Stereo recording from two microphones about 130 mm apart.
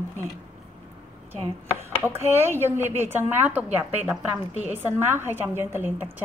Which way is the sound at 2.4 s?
20° right (ahead or behind).